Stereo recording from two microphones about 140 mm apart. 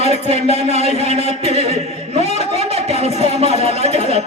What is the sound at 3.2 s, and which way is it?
Music, 45° right (ahead or behind).